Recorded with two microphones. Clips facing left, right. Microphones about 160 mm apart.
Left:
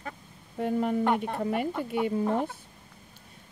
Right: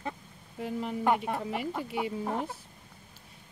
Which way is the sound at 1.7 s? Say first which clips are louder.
Left 4 dB; 5° right (ahead or behind).